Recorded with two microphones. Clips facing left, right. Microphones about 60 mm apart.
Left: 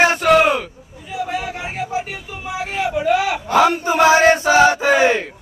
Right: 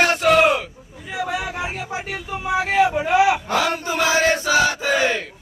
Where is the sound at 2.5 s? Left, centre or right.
Right.